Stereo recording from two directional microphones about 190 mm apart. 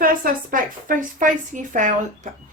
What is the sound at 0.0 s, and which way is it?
Speech, 50° right (ahead or behind).